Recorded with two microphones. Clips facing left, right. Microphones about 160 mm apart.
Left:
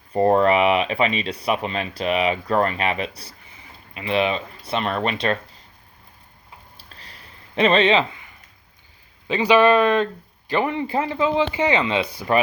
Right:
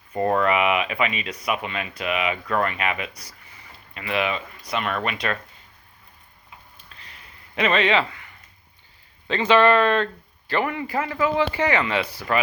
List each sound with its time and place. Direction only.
0.1 s speech: 30° left (ahead or behind)
6.7 s a sound: 35° left (ahead or behind)
9.2 s speech: 15° left (ahead or behind)